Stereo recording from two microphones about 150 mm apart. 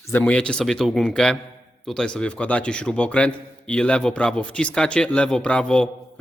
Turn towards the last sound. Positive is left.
turn(degrees=5)  # may be behind; listen again after turning